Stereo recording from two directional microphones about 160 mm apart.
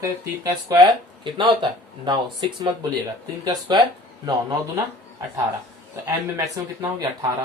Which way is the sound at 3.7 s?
30° right (ahead or behind).